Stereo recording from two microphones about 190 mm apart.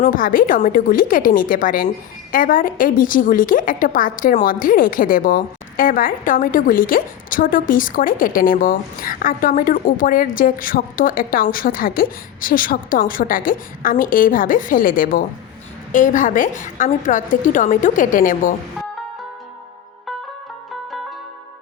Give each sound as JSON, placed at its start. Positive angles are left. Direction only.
{"t": 0.0, "sound": "a woman's voice", "side_deg": 45}